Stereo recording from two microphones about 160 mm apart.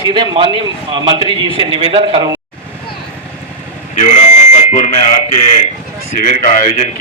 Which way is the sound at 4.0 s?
45° left (ahead or behind).